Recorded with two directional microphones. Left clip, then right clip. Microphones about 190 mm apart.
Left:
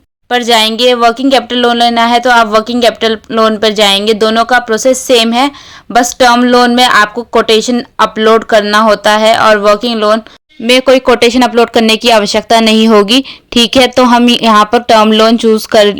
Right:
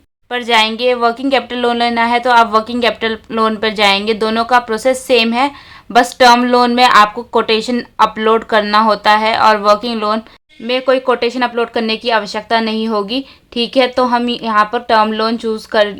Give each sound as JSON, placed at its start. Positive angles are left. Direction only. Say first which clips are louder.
{"t": 0.3, "sound": "speech", "louder": "left 5 dB", "side_deg": 30}
{"t": 10.7, "sound": "speech", "louder": "left 7 dB", "side_deg": 40}